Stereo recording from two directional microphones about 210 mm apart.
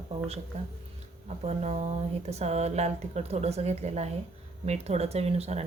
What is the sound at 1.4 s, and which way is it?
Speech, 30° right (ahead or behind).